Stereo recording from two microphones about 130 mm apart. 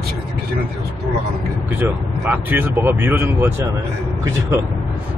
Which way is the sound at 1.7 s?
15° right (ahead or behind).